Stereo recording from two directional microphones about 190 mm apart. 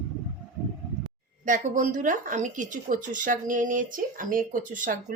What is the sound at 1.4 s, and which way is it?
Speech, 40° right (ahead or behind).